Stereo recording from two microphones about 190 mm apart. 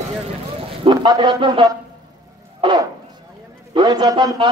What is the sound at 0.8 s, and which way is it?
Speech, 25° right (ahead or behind).